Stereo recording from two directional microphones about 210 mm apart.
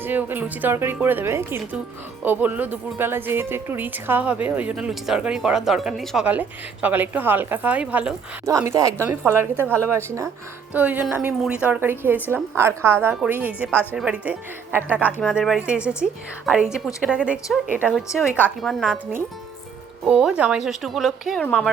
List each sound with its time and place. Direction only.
0.0 s a woman's voice: 10° right (ahead or behind)
20.1 s a woman's voice: 5° right (ahead or behind)